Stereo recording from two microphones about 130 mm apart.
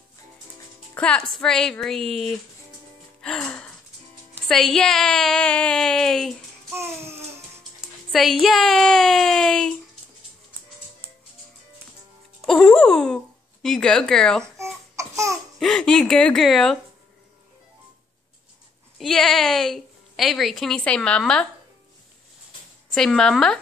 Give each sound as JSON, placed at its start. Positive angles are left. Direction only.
{"t": 0.9, "sound": "a woman's voice", "side_deg": 10}
{"t": 3.2, "sound": "music", "side_deg": 5}
{"t": 4.5, "sound": "a woman's voice", "side_deg": 0}
{"t": 6.7, "sound": "babbling", "side_deg": -20}
{"t": 8.1, "sound": "a woman's voice", "side_deg": 0}
{"t": 12.4, "sound": "speech", "side_deg": 10}
{"t": 14.4, "sound": "babbling", "side_deg": -20}
{"t": 15.6, "sound": "a woman's voice", "side_deg": 5}
{"t": 18.9, "sound": "a woman's voice", "side_deg": 0}
{"t": 22.9, "sound": "a woman's voice", "side_deg": 5}